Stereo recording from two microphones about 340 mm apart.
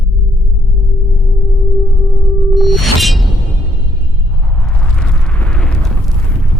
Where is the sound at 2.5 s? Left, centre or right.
Centre.